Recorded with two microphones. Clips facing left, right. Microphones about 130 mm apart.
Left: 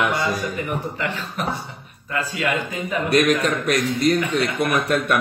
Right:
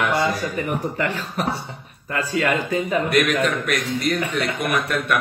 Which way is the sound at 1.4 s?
40° right (ahead or behind).